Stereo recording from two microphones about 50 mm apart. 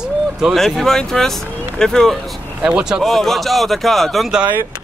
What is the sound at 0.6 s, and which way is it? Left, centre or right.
Speech, centre.